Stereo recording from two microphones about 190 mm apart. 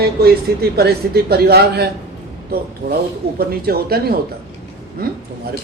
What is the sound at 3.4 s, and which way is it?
Speech, 55° right (ahead or behind).